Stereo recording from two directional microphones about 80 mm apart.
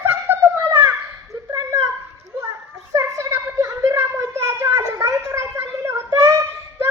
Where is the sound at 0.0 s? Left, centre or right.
Right.